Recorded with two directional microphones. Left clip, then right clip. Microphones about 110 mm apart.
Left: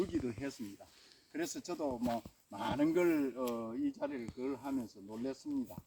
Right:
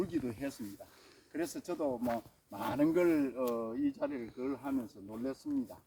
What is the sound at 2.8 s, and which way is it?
Speech, 35° right (ahead or behind).